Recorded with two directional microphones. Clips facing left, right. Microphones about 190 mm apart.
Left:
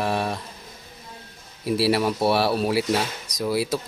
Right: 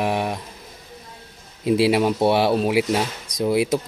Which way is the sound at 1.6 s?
20° right (ahead or behind).